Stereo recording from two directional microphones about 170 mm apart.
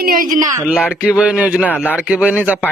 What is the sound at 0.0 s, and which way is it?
Speech, 55° right (ahead or behind).